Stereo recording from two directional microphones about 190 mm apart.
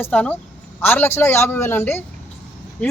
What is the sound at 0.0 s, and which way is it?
Speech, 5° left (ahead or behind).